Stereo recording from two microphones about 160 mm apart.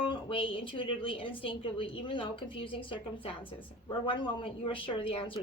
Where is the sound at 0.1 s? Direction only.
35° left (ahead or behind).